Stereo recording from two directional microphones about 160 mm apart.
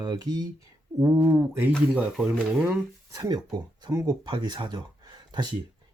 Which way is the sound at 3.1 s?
20° right (ahead or behind).